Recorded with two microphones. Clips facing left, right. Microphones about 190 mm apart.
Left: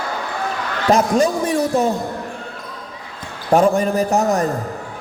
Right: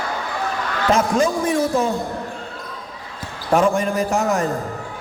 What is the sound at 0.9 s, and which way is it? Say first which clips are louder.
Speech: left 3 dB; 40° left (ahead or behind).